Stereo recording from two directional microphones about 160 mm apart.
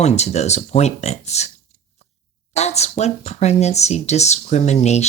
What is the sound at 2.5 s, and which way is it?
Speech, 45° left (ahead or behind).